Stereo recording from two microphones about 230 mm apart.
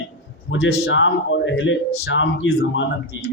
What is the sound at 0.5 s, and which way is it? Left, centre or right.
A man's voice, left.